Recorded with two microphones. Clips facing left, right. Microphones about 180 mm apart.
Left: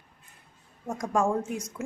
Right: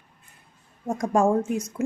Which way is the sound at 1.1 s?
25° right (ahead or behind).